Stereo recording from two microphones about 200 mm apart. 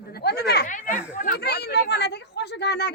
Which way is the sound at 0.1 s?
55° left (ahead or behind).